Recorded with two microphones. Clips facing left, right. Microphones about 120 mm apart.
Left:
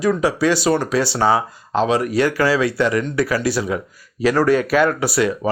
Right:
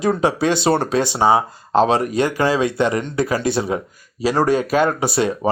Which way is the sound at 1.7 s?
30° right (ahead or behind).